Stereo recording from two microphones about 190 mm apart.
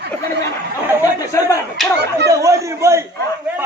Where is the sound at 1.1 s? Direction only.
15° left (ahead or behind).